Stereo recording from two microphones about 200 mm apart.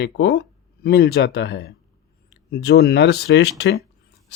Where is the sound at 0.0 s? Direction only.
55° left (ahead or behind).